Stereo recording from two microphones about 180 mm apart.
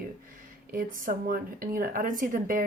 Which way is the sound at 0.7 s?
50° right (ahead or behind).